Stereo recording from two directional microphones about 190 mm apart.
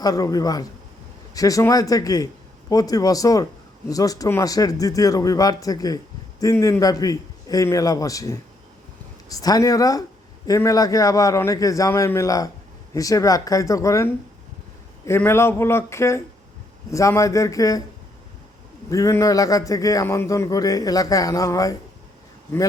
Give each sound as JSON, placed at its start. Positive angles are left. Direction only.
{"t": 0.0, "sound": "speech", "side_deg": 20}
{"t": 18.9, "sound": "speech", "side_deg": 15}